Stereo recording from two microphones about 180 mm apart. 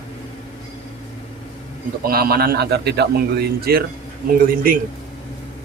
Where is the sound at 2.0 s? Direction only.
55° right (ahead or behind).